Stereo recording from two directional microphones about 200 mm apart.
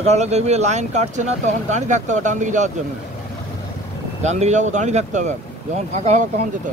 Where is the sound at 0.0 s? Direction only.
35° right (ahead or behind).